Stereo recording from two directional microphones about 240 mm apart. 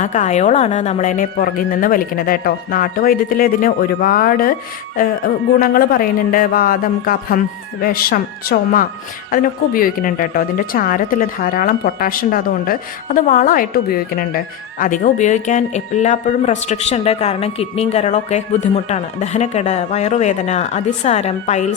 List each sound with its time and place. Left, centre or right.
0.0 s a woman's voice: left